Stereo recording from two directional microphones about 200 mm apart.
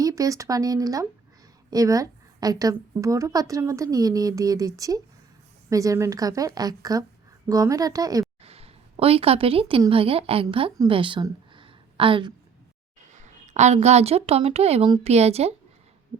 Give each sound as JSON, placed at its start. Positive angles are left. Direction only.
{"t": 0.0, "sound": "a woman's voice", "side_deg": -15}
{"t": 8.4, "sound": "a woman's voice", "side_deg": -30}
{"t": 13.1, "sound": "a woman's voice", "side_deg": -35}